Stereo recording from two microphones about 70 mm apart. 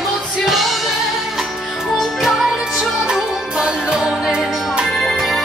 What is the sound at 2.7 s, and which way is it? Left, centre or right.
Music, centre.